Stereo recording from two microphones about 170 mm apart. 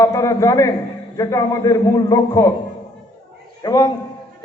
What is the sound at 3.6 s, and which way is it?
Speech, 20° left (ahead or behind).